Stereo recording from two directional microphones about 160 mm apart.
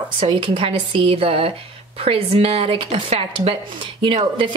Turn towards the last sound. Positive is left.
turn(degrees=-35)  # may be behind; listen again after turning